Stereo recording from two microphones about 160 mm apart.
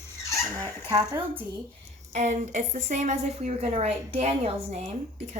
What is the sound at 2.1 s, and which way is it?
A woman's voice, 50° right (ahead or behind).